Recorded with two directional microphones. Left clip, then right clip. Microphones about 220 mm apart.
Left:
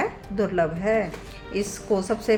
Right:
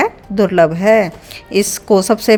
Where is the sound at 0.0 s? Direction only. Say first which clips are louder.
Right 11 dB; 45° right (ahead or behind).